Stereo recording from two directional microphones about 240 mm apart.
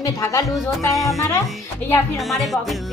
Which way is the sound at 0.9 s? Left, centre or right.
Centre.